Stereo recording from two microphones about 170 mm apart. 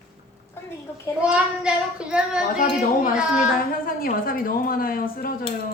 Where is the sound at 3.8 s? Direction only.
60° left (ahead or behind).